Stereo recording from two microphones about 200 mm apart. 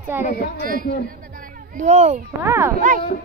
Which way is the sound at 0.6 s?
45° right (ahead or behind).